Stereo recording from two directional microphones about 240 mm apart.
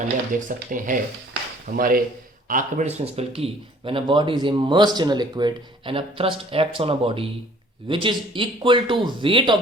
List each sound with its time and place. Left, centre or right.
0.3 s speech: right